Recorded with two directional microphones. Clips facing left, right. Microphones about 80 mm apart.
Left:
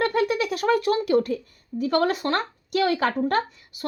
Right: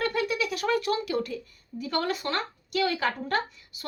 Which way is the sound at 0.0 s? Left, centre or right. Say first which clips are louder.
Left 5 dB; left.